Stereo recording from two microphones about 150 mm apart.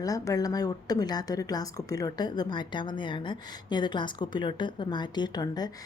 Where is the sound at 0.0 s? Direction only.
25° left (ahead or behind).